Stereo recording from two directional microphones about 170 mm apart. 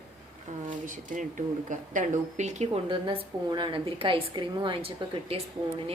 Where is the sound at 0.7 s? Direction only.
50° right (ahead or behind).